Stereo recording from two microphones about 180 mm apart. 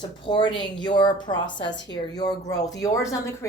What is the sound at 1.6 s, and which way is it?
Speech, 85° left.